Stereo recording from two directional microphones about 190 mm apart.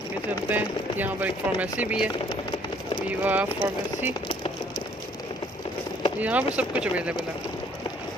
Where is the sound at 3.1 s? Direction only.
10° right (ahead or behind).